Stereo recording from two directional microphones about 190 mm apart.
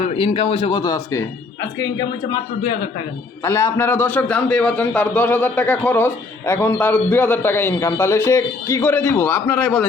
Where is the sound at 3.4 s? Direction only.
15° left (ahead or behind).